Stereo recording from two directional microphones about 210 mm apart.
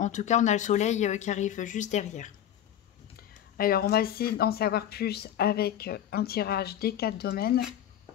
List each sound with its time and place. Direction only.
0.0 s speech: 35° left (ahead or behind)
3.2 s speech: 45° left (ahead or behind)